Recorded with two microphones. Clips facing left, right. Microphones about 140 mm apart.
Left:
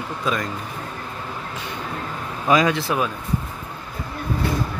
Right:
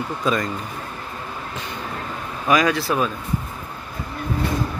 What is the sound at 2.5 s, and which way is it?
Speech, 20° left (ahead or behind).